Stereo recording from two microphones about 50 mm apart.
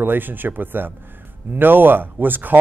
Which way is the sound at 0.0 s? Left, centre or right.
Right.